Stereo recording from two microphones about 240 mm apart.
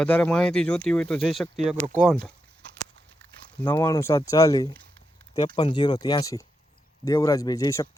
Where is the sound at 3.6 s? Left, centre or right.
Centre.